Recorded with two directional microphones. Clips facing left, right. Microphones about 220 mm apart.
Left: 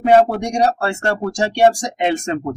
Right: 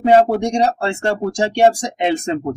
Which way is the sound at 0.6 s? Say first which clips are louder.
Even; 25° right (ahead or behind).